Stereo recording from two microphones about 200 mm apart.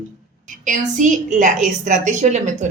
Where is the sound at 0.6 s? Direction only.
40° right (ahead or behind).